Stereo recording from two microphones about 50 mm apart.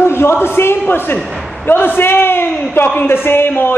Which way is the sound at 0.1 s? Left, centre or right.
Left.